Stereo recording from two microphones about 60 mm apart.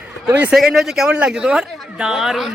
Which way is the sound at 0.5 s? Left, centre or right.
Centre.